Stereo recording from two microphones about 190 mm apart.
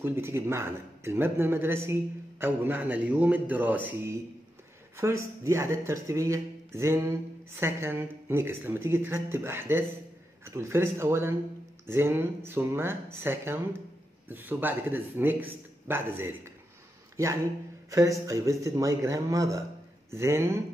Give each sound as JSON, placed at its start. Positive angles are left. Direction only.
{"t": 0.0, "sound": "speech", "side_deg": -10}
{"t": 17.8, "sound": "speech", "side_deg": -15}